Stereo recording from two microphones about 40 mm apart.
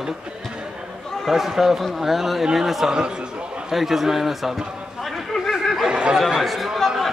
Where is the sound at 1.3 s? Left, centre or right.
Centre.